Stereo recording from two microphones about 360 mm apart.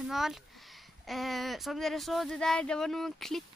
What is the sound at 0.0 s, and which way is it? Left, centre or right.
Speech, centre.